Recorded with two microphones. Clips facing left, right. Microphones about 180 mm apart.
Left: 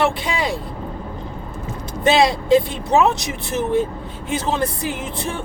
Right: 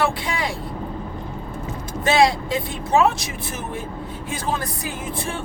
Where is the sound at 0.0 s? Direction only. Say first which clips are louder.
Left 3 dB; 20° left (ahead or behind).